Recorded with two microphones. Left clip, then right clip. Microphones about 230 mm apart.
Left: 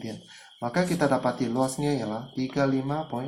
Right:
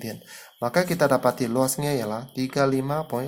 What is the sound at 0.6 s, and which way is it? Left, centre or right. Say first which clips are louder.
Speech: right 4 dB; right.